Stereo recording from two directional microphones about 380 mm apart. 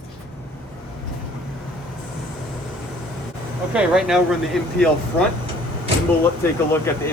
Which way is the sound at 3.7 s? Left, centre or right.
Centre.